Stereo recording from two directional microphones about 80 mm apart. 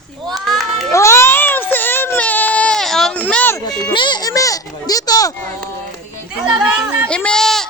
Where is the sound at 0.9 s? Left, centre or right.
Left.